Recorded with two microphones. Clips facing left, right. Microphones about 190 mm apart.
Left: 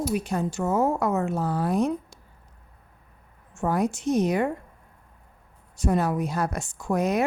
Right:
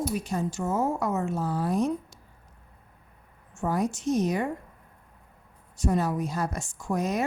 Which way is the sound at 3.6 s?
60° left (ahead or behind).